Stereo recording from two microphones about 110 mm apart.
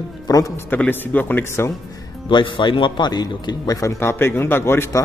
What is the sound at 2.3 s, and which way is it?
A man's voice, 50° left (ahead or behind).